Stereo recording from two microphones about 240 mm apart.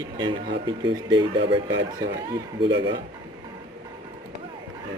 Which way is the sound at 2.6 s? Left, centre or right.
Right.